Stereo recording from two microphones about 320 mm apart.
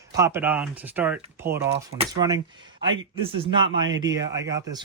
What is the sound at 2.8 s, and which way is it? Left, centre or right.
Speech, right.